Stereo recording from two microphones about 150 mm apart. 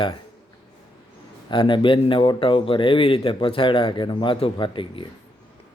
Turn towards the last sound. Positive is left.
turn(degrees=35)  # may be behind; listen again after turning